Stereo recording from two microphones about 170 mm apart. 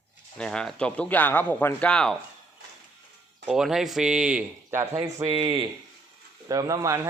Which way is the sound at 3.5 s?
Centre (ahead or behind).